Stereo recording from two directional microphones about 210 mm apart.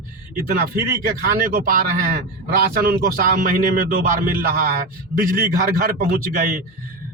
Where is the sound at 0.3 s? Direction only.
45° right (ahead or behind).